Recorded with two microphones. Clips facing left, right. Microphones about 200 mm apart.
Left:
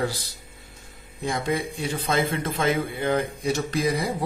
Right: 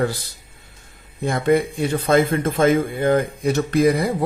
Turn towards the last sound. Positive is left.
turn(degrees=-55)  # may be behind; listen again after turning